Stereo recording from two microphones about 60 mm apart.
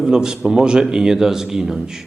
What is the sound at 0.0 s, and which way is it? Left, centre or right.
Speech, centre.